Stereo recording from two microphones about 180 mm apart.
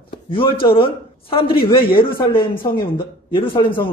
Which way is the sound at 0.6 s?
30° left (ahead or behind).